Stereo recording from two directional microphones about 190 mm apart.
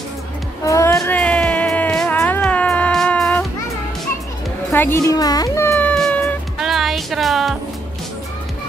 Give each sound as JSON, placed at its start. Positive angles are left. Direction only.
{"t": 0.7, "sound": "music", "side_deg": 15}
{"t": 4.7, "sound": "music", "side_deg": 10}